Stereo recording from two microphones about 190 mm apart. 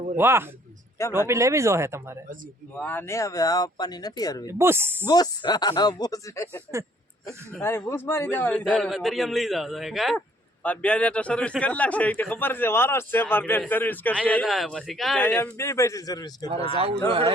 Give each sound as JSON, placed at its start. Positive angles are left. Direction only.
{"t": 0.2, "sound": "speech", "side_deg": -10}
{"t": 2.8, "sound": "speech", "side_deg": 10}
{"t": 4.4, "sound": "speech", "side_deg": -15}
{"t": 5.0, "sound": "a man's voice", "side_deg": 20}
{"t": 16.7, "sound": "a man's voice", "side_deg": -30}